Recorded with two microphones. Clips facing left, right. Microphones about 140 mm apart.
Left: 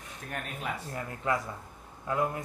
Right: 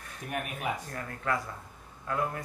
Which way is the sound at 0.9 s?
20° left (ahead or behind).